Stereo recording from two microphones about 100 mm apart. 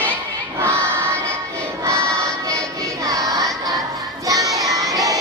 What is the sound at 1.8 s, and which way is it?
Choir, 30° right (ahead or behind).